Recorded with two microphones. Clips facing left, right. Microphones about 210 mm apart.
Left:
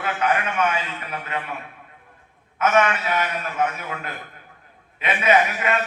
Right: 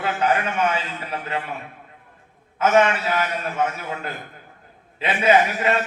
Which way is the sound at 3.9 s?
35° right (ahead or behind).